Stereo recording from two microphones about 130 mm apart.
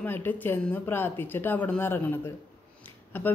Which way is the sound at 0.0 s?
15° left (ahead or behind).